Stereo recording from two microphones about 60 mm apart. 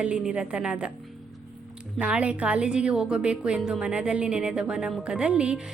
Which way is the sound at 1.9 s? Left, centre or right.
Right.